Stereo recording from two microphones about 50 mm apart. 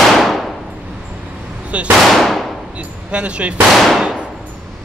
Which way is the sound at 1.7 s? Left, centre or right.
Right.